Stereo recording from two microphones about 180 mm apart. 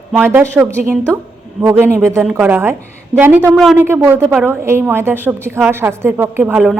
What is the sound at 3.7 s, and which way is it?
A woman's voice, 10° right (ahead or behind).